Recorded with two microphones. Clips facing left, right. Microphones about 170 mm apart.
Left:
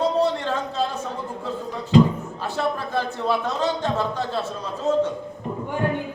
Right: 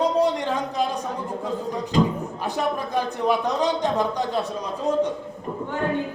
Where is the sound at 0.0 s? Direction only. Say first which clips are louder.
Even; 15° right (ahead or behind).